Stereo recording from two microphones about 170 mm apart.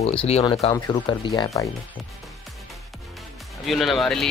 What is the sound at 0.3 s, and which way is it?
Speech, 35° left (ahead or behind).